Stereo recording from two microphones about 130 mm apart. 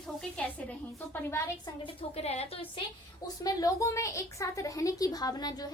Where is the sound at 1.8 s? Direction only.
50° left (ahead or behind).